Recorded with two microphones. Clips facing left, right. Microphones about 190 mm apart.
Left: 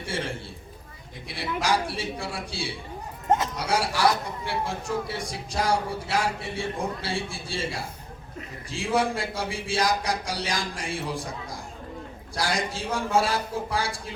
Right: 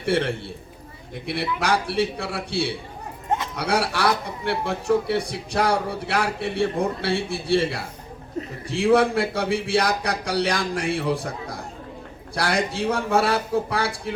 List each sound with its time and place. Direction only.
0.0 s a man's voice: 65° right (ahead or behind)